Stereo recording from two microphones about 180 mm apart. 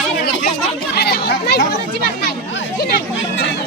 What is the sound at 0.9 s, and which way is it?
Speech, 65° left (ahead or behind).